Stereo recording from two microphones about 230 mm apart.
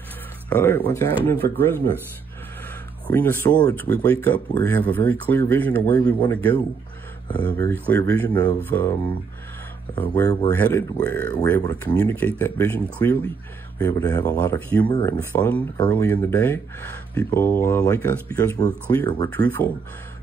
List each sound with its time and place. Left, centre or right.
0.5 s speech: centre
1.4 s speech: right
3.1 s speech: centre
9.9 s speech: centre
15.3 s speech: centre